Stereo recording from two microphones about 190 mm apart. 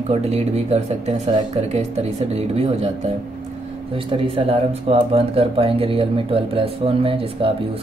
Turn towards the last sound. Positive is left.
turn(degrees=-30)  # may be behind; listen again after turning